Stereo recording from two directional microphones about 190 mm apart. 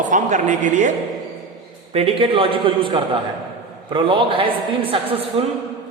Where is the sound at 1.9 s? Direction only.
30° right (ahead or behind).